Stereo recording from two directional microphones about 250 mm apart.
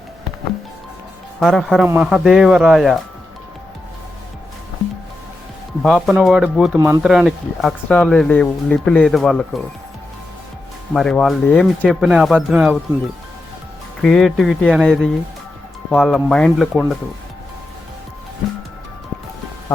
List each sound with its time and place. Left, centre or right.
1.4 s speech: centre
5.8 s speech: centre
6.7 s speech: centre
7.0 s speech: centre
10.9 s speech: centre
14.0 s speech: centre